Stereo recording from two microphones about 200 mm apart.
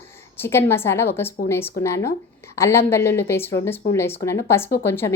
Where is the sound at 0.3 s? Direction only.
10° left (ahead or behind).